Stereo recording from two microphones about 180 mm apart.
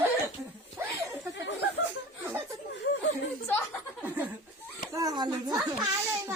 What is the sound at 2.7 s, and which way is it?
Chuckle, 75° left (ahead or behind).